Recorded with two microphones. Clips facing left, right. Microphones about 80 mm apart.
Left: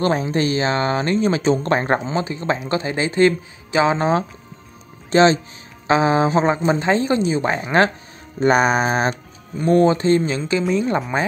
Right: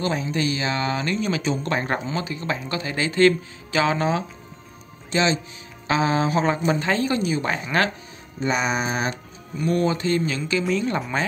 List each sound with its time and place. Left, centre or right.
0.2 s a woman's voice: left
5.1 s speech: left
5.9 s a woman's voice: left
8.4 s music: left
9.6 s a woman's voice: left; by 11.0 s centre